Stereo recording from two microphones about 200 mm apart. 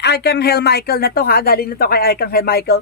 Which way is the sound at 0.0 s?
55° left (ahead or behind).